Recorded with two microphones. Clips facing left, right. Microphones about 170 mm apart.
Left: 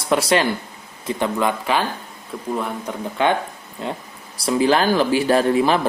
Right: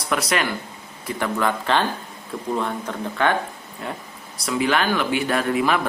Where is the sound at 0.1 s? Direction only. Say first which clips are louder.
Left 5 dB; 30° left (ahead or behind); by 2.9 s 5° left (ahead or behind).